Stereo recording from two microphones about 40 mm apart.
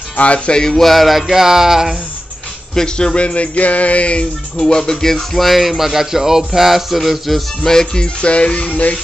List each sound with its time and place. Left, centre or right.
0.1 s music: left
0.5 s music: centre
0.7 s a sound: centre
2.7 s speech: centre
3.2 s a sound: left
4.6 s speech: centre
7.6 s music: centre; by 8.9 s left